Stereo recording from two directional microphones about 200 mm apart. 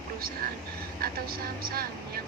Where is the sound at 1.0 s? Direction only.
50° right (ahead or behind).